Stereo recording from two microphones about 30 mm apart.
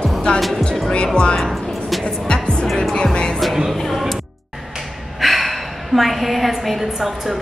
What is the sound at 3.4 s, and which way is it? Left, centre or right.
Music, centre.